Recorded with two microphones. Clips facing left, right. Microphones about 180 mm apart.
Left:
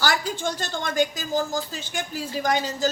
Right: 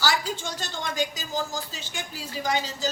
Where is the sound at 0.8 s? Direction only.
55° left (ahead or behind).